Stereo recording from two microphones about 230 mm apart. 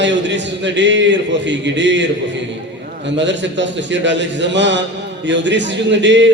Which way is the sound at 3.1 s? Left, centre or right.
Right.